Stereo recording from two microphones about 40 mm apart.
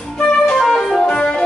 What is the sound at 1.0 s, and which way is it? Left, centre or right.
Music, left.